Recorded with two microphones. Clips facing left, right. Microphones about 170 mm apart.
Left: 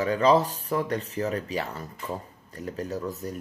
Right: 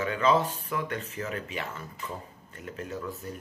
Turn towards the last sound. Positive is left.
turn(degrees=40)  # may be behind; listen again after turning